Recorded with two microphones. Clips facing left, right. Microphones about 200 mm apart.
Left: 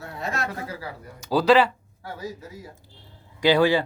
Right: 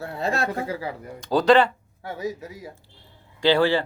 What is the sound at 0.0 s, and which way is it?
Speech, 30° right (ahead or behind).